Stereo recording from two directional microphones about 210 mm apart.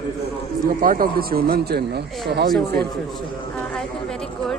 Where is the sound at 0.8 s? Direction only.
45° right (ahead or behind).